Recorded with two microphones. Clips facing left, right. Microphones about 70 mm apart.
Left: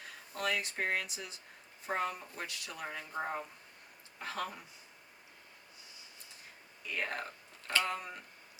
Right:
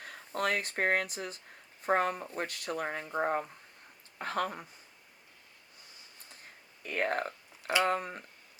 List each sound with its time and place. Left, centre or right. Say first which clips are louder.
0.0 s speech: right 5 dB; right
6.8 s speech: right 6 dB; right